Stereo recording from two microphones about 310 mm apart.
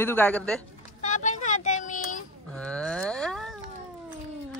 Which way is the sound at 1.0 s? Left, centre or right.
Left.